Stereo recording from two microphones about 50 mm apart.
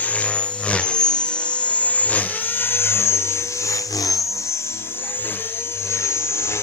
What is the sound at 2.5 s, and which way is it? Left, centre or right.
Vehicle, left.